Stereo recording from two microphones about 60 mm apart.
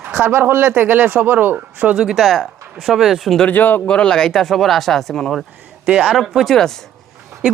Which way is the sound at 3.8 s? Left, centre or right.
Centre.